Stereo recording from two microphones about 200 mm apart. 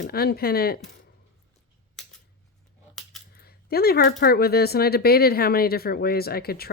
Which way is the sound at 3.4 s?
50° left (ahead or behind).